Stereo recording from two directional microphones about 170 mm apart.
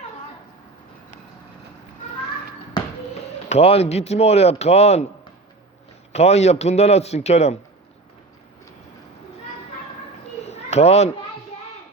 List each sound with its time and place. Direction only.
3.5 s speech: 35° left (ahead or behind)
6.1 s speech: 40° left (ahead or behind)
10.4 s children playing: 40° left (ahead or behind)